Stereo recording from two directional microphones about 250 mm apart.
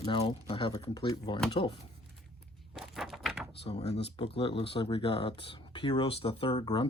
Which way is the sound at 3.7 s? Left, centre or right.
Left.